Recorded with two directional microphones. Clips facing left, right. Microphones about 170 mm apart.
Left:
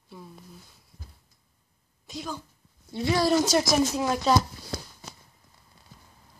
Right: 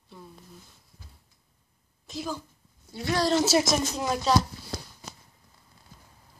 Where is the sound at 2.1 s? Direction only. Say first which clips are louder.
Right 2 dB; 5° right (ahead or behind).